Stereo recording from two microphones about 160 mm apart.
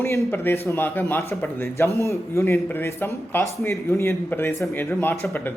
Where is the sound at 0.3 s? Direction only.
15° left (ahead or behind).